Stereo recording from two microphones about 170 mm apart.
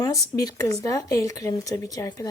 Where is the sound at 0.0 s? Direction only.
20° left (ahead or behind).